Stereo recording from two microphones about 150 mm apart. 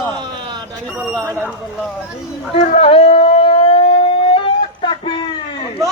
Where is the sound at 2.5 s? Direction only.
50° left (ahead or behind).